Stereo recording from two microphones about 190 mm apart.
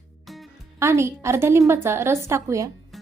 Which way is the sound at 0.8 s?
15° right (ahead or behind).